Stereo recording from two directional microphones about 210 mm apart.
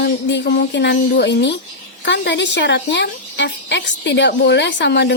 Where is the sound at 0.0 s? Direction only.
55° left (ahead or behind).